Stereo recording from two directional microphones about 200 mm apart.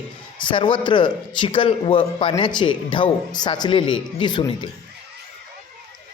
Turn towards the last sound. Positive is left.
turn(degrees=20)  # may be behind; listen again after turning